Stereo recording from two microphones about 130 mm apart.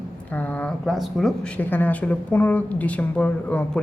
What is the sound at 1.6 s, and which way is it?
A woman's voice, 15° left (ahead or behind).